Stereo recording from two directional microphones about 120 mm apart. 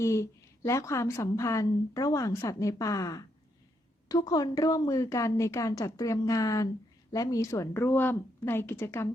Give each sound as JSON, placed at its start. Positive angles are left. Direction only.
{"t": 0.0, "sound": "a woman's voice", "side_deg": 25}